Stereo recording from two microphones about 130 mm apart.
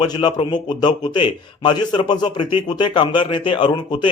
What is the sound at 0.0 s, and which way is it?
A man's voice, 35° left (ahead or behind).